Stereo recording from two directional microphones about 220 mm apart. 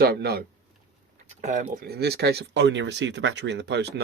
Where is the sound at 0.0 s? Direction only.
45° right (ahead or behind).